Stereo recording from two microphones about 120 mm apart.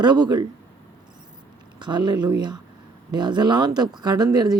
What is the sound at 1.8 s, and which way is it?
Speech, 40° right (ahead or behind).